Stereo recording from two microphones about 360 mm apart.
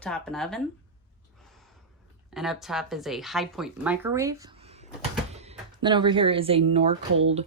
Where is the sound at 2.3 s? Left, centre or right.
Centre.